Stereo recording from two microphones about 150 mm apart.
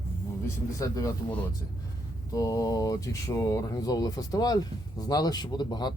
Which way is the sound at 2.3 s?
25° left (ahead or behind).